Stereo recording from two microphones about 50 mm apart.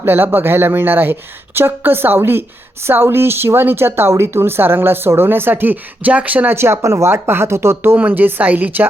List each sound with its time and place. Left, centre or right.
0.0 s speech: right
6.5 s speech: right
7.1 s speech: right
7.9 s speech: right